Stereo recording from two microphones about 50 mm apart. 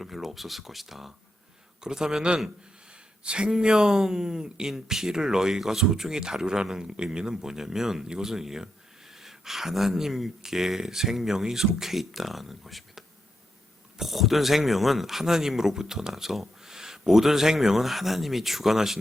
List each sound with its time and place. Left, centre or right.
0.0 s speech: centre
2.9 s a sound: right
3.5 s speech: centre